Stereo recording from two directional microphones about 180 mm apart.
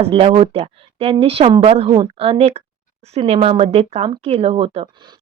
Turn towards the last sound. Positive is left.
turn(degrees=-30)  # may be behind; listen again after turning